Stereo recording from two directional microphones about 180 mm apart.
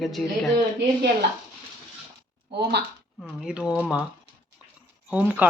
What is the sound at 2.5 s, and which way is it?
Speech, 65° right (ahead or behind).